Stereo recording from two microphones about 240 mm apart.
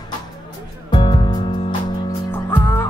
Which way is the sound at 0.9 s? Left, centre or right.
Centre.